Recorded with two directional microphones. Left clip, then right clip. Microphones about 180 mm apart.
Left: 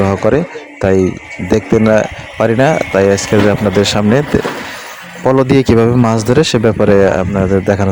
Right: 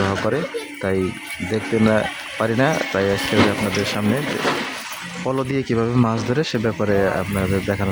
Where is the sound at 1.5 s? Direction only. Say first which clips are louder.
Left 9 dB; 35° left (ahead or behind).